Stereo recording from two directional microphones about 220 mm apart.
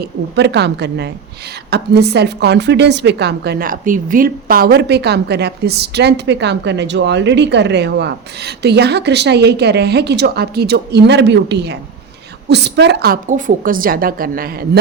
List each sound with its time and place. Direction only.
0.3 s a woman's voice: 50° right (ahead or behind)